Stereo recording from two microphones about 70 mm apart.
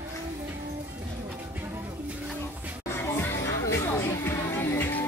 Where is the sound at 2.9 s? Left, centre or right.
Left.